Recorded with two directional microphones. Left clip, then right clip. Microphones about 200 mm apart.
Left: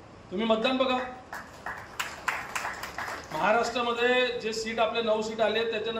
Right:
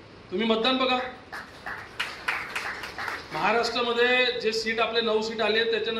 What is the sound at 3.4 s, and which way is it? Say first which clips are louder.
A man's voice: right 1 dB; 50° left (ahead or behind).